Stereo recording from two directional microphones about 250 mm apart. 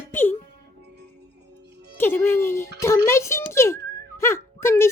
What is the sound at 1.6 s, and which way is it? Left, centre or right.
Music, right.